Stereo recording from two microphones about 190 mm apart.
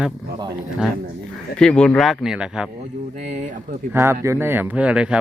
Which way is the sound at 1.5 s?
5° left (ahead or behind).